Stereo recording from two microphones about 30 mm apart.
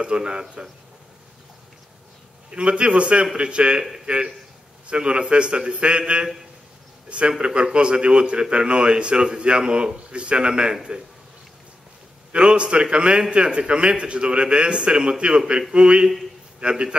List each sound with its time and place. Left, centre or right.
0.0 s a man's voice: right
2.5 s a man's voice: right
12.3 s a man's voice: right